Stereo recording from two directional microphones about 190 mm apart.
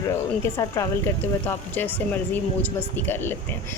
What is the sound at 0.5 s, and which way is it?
A woman's voice, 20° left (ahead or behind).